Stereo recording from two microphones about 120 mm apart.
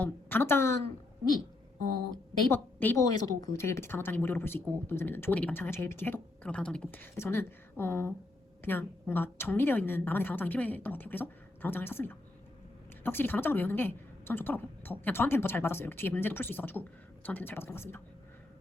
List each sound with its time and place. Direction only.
0.0 s speech: 15° left (ahead or behind)
2.5 s speech: 15° left (ahead or behind)
3.0 s speech: 30° left (ahead or behind)